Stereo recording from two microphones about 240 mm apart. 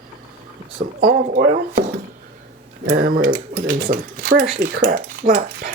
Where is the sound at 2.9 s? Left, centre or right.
Right.